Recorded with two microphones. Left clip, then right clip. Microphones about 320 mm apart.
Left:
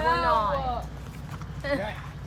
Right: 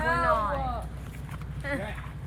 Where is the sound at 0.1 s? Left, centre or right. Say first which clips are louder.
Left 2 dB; left.